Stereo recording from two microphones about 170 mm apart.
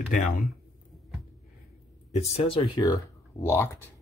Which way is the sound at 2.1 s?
35° left (ahead or behind).